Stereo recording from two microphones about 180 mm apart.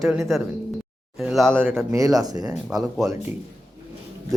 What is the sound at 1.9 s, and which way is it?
Speech, 20° right (ahead or behind).